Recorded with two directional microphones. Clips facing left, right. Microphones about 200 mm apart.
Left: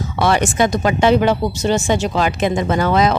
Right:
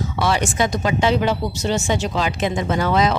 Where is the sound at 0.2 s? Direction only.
55° left (ahead or behind).